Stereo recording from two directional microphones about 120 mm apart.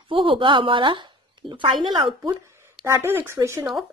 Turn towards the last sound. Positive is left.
turn(degrees=-25)  # may be behind; listen again after turning